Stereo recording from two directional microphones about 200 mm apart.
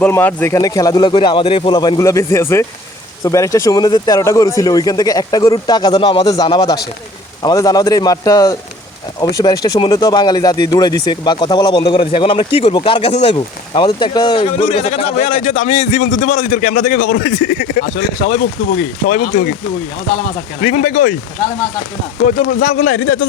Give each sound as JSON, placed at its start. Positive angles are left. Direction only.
{"t": 0.0, "sound": "a man's voice", "side_deg": 10}
{"t": 20.6, "sound": "a man's voice", "side_deg": 40}
{"t": 22.4, "sound": "speech", "side_deg": 65}